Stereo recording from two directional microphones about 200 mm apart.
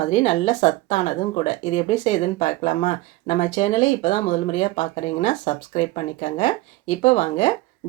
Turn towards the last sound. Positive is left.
turn(degrees=35)  # may be behind; listen again after turning